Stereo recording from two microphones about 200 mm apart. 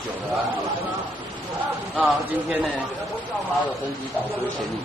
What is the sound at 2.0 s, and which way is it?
Speech, 5° right (ahead or behind).